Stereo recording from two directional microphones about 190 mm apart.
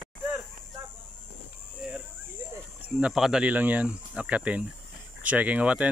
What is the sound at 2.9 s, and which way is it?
Speech, 5° right (ahead or behind).